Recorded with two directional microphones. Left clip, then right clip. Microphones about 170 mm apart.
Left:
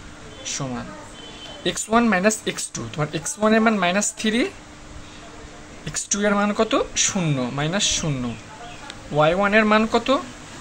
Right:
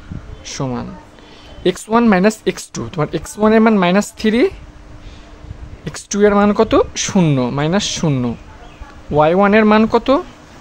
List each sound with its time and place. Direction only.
0.5 s speech: 60° right (ahead or behind)
5.9 s speech: 60° right (ahead or behind)